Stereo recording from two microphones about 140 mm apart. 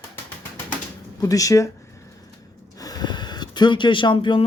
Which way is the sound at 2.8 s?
30° left (ahead or behind).